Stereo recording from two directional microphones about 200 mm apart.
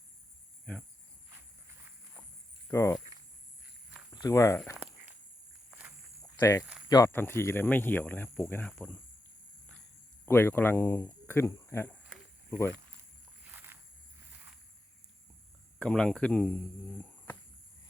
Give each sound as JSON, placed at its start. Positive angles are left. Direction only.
{"t": 2.6, "sound": "speech", "side_deg": 15}
{"t": 4.1, "sound": "speech", "side_deg": 20}
{"t": 4.8, "sound": "a sound", "side_deg": -10}
{"t": 6.4, "sound": "speech", "side_deg": 15}
{"t": 10.2, "sound": "speech", "side_deg": 10}
{"t": 13.4, "sound": "a sound", "side_deg": -10}
{"t": 15.8, "sound": "speech", "side_deg": 5}